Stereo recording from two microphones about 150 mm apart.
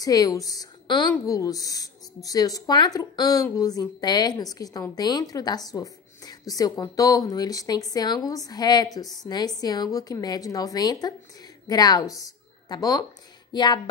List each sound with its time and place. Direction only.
0.0 s a woman's voice: 25° left (ahead or behind)